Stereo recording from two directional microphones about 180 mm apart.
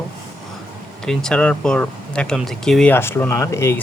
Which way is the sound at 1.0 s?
5° left (ahead or behind).